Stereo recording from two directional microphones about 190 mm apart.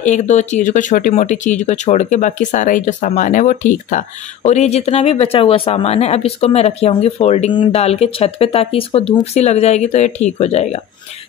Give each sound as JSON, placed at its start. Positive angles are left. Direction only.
{"t": 0.0, "sound": "speech", "side_deg": 40}